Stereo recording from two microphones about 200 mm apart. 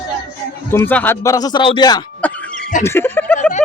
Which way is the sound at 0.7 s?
10° left (ahead or behind).